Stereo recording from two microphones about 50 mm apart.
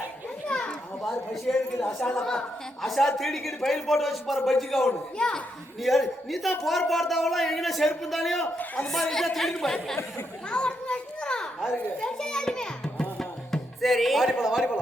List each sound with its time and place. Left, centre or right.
0.4 s children playing: centre
1.5 s speech: centre
4.9 s speech: centre
5.8 s speech: centre
8.5 s a man's voice: left
8.9 s speech: centre
10.5 s children playing: centre
12.0 s music: centre
13.8 s a man's voice: centre